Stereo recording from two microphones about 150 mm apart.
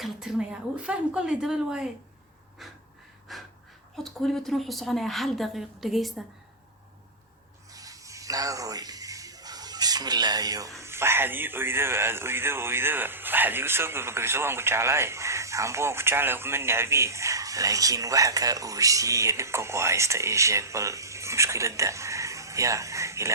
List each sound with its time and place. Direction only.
0.0 s a woman's voice: centre (ahead or behind)
2.6 s breathing: centre (ahead or behind)
3.3 s wheeze: centre (ahead or behind)
3.9 s a woman's voice: 5° left (ahead or behind)
7.7 s a sound: 25° right (ahead or behind)
10.8 s speech: 15° right (ahead or behind)